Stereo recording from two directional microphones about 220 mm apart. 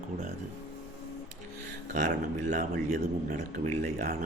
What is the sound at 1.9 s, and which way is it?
Speech, 35° right (ahead or behind).